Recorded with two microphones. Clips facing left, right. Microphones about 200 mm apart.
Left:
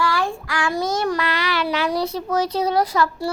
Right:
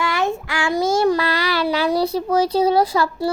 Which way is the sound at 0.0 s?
20° right (ahead or behind).